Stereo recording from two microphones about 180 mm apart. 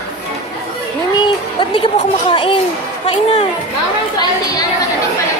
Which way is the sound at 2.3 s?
30° left (ahead or behind).